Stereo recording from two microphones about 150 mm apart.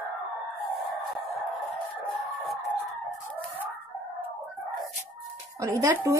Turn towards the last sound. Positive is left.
turn(degrees=-20)  # may be behind; listen again after turning